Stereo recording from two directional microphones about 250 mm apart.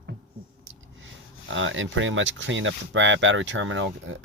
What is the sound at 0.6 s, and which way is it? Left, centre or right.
Speech, right.